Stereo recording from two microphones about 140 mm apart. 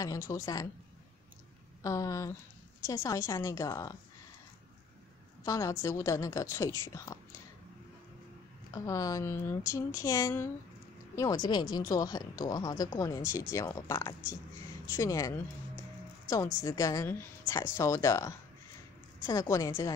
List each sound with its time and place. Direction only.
0.0 s a woman's voice: 25° left (ahead or behind)
1.8 s a woman's voice: 25° left (ahead or behind)
5.4 s a woman's voice: 25° left (ahead or behind)
8.7 s a woman's voice: 25° left (ahead or behind)
16.6 s a woman's voice: 25° left (ahead or behind)